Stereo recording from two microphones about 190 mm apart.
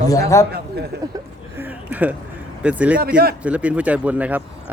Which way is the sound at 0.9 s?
60° right (ahead or behind).